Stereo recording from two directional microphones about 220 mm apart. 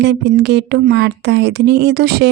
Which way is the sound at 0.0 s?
50° right (ahead or behind).